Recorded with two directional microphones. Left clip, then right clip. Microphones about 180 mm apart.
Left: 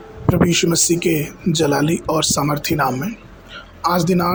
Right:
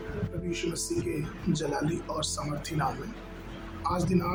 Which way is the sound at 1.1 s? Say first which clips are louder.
Left 13 dB; 55° left (ahead or behind).